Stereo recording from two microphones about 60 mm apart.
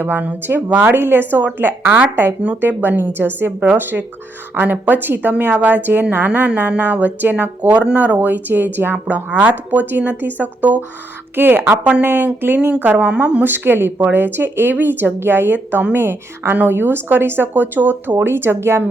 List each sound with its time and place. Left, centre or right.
0.0 s a woman's voice: right
11.3 s a woman's voice: right; by 13.4 s centre
13.4 s speech: right
18.2 s speech: right